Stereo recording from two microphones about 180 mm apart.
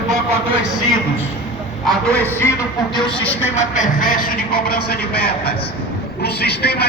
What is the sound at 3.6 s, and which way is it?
A man's voice, 45° left (ahead or behind).